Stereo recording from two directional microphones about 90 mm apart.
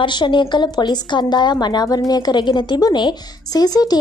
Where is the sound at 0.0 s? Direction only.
60° left (ahead or behind).